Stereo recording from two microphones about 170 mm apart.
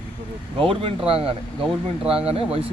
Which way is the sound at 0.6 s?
30° right (ahead or behind).